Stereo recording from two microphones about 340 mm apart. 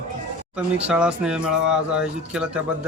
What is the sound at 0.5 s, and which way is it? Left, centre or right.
A woman's voice, centre.